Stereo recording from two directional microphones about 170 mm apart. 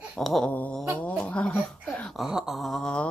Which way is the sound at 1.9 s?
5° left (ahead or behind).